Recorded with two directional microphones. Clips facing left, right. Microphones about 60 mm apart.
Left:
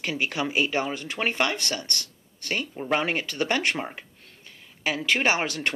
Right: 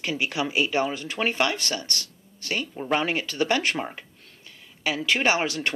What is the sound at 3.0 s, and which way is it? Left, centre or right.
Speech, left.